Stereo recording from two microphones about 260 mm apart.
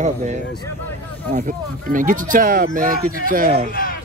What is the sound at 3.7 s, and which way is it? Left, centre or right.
Speech, left.